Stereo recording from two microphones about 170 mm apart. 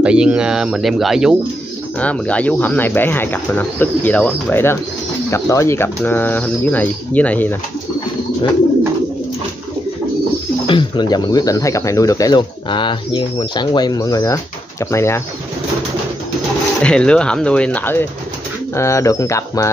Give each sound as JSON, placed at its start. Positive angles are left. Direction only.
{"t": 0.0, "sound": "speech", "side_deg": -5}
{"t": 10.7, "sound": "speech", "side_deg": 25}
{"t": 16.8, "sound": "speech", "side_deg": 5}